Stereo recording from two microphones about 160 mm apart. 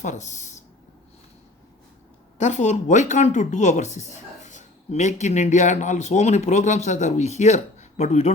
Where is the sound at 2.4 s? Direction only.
45° left (ahead or behind).